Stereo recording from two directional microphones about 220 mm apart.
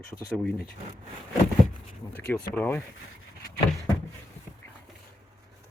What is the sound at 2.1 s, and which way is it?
Speech, 5° left (ahead or behind).